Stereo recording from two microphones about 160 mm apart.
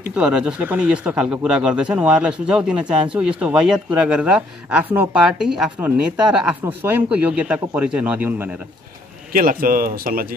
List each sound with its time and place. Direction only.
0.0 s speech: 5° right (ahead or behind)
9.3 s speech: 60° right (ahead or behind)